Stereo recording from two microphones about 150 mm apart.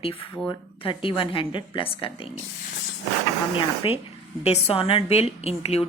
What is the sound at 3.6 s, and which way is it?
A woman's voice, 35° left (ahead or behind).